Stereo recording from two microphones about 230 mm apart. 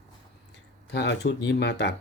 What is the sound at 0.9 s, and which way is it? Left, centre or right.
Speech, left.